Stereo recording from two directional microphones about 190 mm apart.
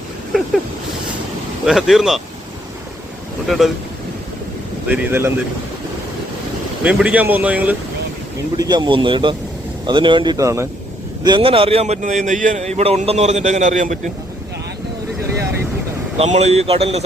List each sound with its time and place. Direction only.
1.6 s speech: centre (ahead or behind)
3.5 s speech: centre (ahead or behind)
4.9 s speech: 10° right (ahead or behind)
6.8 s speech: 10° right (ahead or behind)
8.5 s a man's voice: 20° right (ahead or behind); by 14.1 s 40° right (ahead or behind)
16.1 s a man's voice: 35° right (ahead or behind)